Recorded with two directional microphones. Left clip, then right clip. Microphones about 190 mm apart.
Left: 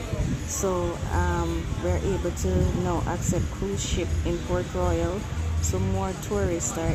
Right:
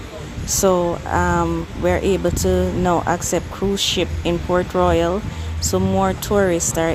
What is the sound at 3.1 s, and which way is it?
Speech, 40° right (ahead or behind).